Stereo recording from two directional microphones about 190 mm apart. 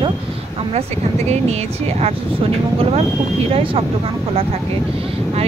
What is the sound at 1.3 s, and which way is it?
Speech, 35° right (ahead or behind).